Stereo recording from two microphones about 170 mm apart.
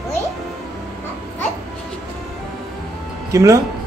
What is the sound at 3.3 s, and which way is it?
Speech, 15° right (ahead or behind).